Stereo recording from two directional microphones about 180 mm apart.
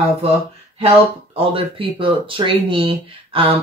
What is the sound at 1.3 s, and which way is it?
Speech, 30° right (ahead or behind).